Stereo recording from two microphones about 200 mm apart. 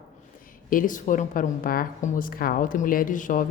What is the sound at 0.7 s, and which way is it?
A woman's voice, 40° left (ahead or behind).